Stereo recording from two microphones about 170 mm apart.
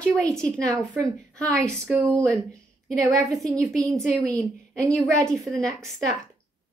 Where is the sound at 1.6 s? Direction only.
10° right (ahead or behind).